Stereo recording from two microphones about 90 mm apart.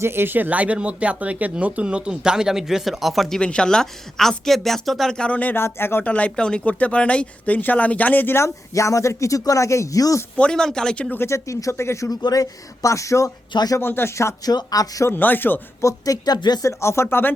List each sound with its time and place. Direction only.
0.0 s speech: 25° right (ahead or behind); by 10.2 s 40° left (ahead or behind)
10.3 s speech: 10° left (ahead or behind)
11.1 s speech: 30° left (ahead or behind)
13.5 s speech: 50° left (ahead or behind)
13.7 s speech: 25° left (ahead or behind)
14.4 s speech: 45° left (ahead or behind)
15.1 s speech: 20° left (ahead or behind)
15.8 s speech: 40° left (ahead or behind)
16.6 s speech: 30° left (ahead or behind)